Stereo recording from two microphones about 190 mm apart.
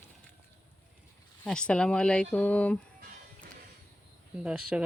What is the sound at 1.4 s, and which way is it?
Speech, 5° left (ahead or behind).